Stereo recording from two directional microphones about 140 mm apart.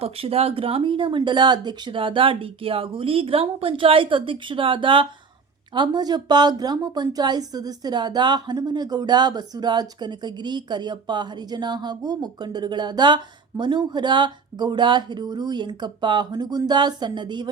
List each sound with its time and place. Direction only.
0.0 s speech: 45° right (ahead or behind)